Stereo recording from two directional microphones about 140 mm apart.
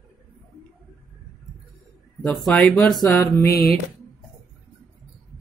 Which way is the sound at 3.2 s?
20° left (ahead or behind).